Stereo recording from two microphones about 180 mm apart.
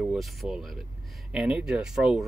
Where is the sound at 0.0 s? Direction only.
Centre (ahead or behind).